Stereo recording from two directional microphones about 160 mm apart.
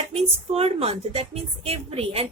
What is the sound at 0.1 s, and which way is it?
Speech, 40° right (ahead or behind).